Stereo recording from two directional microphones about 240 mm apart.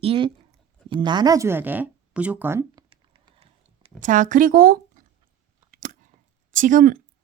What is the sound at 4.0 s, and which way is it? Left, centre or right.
A woman's voice, right.